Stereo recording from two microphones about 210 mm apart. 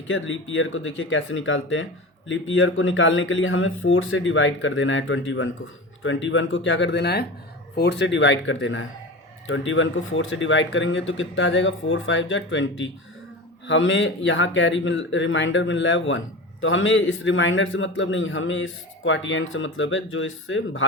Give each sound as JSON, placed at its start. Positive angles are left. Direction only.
{"t": 0.1, "sound": "speech", "side_deg": 65}